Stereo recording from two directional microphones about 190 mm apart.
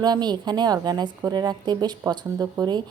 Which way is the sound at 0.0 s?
20° right (ahead or behind).